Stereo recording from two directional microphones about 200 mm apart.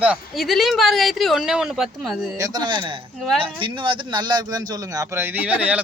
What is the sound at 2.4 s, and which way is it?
Speech, 20° right (ahead or behind).